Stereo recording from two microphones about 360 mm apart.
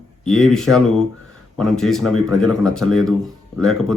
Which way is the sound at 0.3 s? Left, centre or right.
Centre.